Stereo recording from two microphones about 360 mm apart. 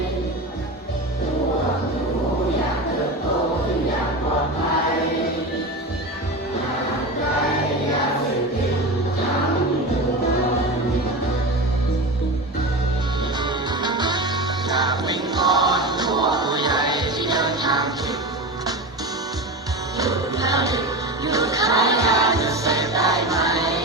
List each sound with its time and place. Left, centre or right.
13.4 s music: centre
20.0 s music: centre